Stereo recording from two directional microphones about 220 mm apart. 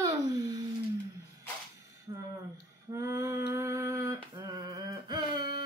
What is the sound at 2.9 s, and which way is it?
Female singing, 15° right (ahead or behind).